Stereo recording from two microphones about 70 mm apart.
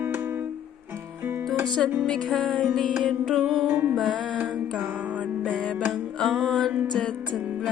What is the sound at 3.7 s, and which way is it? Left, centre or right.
Music, right.